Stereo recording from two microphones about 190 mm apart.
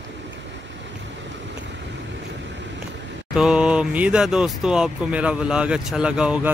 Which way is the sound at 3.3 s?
5° right (ahead or behind).